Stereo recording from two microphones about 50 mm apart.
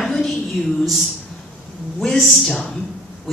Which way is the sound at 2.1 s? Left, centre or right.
Centre.